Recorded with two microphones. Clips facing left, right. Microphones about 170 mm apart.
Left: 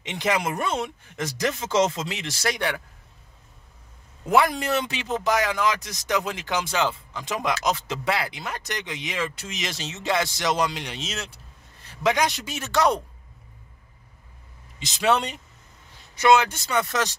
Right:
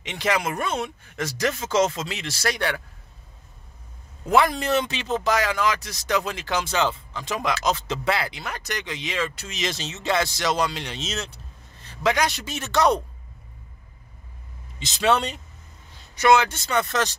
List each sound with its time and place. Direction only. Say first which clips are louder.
0.0 s speech: even; 15° left (ahead or behind)
4.3 s a man's voice: right 1 dB; 10° left (ahead or behind)
14.8 s speech: right 1 dB; 10° left (ahead or behind)
16.3 s speech: right 1 dB; 10° left (ahead or behind)